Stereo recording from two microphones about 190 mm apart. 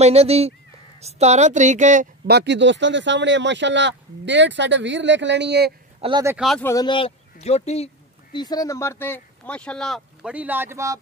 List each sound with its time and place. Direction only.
0.0 s speech: 30° right (ahead or behind)
2.2 s speech: 65° right (ahead or behind)
5.9 s speech: 25° right (ahead or behind)
6.2 s speech: 5° right (ahead or behind)
6.6 s speech: 20° left (ahead or behind); by 11.0 s 15° right (ahead or behind)